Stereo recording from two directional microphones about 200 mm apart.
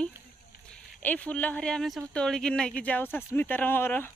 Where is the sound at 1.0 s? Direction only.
10° left (ahead or behind).